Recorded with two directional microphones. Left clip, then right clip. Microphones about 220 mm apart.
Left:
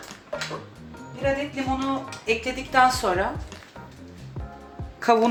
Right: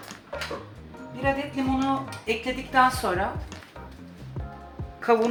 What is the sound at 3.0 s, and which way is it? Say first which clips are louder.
Speech: left 3 dB; 40° left (ahead or behind).